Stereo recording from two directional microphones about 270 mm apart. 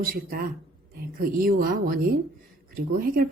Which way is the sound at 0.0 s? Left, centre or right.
Right.